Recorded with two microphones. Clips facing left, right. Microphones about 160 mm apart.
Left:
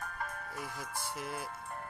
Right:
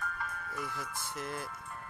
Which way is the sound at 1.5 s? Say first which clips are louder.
Left 2 dB; 45° left (ahead or behind).